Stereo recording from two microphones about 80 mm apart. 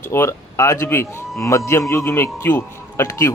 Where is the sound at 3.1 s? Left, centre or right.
Left.